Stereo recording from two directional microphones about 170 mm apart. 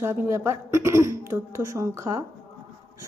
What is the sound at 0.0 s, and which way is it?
A woman's voice, 15° right (ahead or behind).